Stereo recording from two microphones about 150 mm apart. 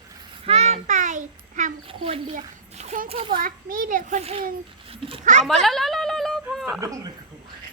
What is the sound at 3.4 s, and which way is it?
A child's voice, 65° right (ahead or behind).